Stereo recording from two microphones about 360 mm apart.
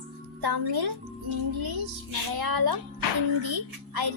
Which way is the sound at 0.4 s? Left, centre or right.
Right.